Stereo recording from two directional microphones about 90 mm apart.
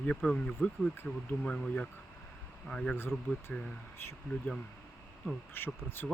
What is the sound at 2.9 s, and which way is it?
Speech, 25° left (ahead or behind).